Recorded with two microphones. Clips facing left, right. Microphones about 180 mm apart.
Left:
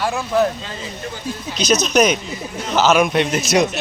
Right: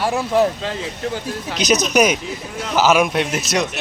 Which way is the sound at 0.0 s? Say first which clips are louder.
Right 1 dB; 30° right (ahead or behind).